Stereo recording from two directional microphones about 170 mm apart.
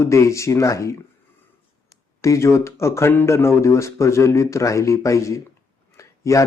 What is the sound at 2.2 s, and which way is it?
Speech, 15° left (ahead or behind).